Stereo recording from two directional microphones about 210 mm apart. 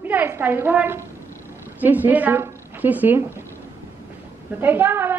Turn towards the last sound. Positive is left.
turn(degrees=-10)  # may be behind; listen again after turning